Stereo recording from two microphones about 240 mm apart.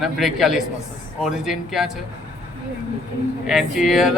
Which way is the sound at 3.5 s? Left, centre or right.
Centre.